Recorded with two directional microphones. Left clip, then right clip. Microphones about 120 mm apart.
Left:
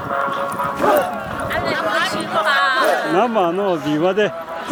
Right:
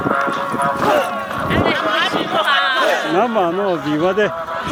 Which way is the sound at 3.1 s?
Centre (ahead or behind).